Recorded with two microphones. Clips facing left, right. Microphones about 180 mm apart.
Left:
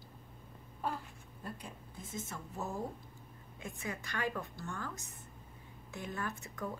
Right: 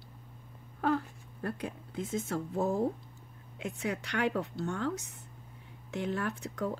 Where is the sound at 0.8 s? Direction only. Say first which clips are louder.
Right 10 dB; 70° right (ahead or behind).